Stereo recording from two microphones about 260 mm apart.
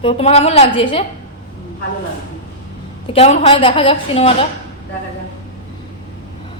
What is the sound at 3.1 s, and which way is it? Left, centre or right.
A woman's voice, left.